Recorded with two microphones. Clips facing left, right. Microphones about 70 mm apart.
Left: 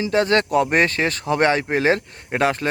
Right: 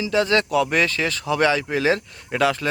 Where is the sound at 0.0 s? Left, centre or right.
Left.